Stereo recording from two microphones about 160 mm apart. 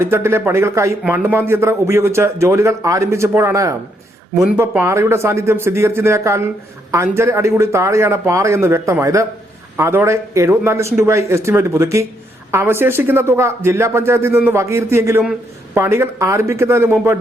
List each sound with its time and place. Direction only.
0.0 s speech: 15° right (ahead or behind)